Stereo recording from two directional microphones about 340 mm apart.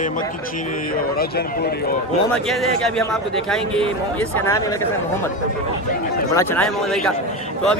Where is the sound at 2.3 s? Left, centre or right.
Centre.